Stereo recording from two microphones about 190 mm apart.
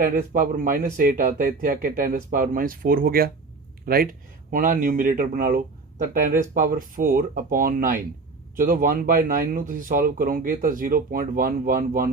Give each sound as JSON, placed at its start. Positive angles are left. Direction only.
{"t": 0.0, "sound": "speech", "side_deg": -45}